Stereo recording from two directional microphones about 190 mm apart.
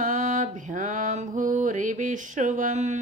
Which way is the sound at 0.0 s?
40° right (ahead or behind).